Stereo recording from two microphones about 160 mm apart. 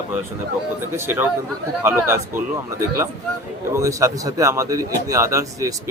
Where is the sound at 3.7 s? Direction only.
20° right (ahead or behind).